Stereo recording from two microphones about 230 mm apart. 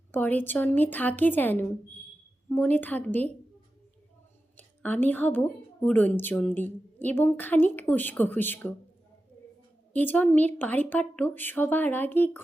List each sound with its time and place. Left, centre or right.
0.1 s a woman's voice: centre
4.5 s a woman's voice: centre
9.9 s a woman's voice: centre